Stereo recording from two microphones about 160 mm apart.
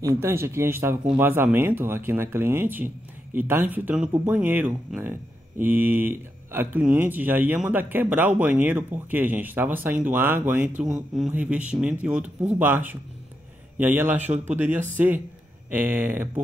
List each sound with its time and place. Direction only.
0.0 s speech: 15° right (ahead or behind)